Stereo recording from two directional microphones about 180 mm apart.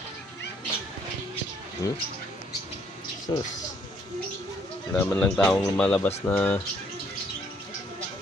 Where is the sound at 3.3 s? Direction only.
25° left (ahead or behind).